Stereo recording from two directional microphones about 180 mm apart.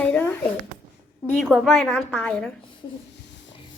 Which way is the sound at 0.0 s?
10° left (ahead or behind).